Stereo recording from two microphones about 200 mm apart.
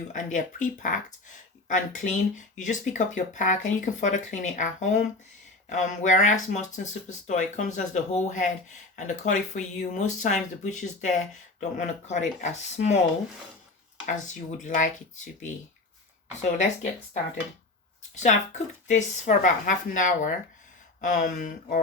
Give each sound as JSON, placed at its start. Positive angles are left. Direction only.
{"t": 0.1, "sound": "speech", "side_deg": 40}
{"t": 14.1, "sound": "speech", "side_deg": 40}
{"t": 16.4, "sound": "speech", "side_deg": 35}
{"t": 18.1, "sound": "speech", "side_deg": 35}